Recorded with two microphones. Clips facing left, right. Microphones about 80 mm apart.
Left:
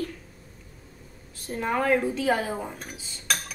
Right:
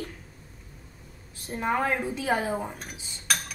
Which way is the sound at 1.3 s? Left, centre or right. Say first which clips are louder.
Even; right.